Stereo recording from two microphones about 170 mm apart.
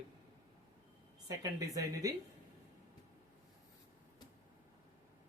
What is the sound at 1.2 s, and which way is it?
Speech, 20° right (ahead or behind).